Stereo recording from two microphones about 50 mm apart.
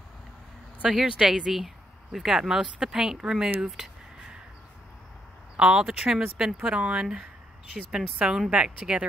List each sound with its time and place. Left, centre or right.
0.8 s speech: centre
3.7 s a sound: centre
5.6 s speech: centre